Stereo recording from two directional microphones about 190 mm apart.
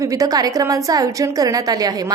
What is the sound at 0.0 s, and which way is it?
A woman's voice, 20° right (ahead or behind).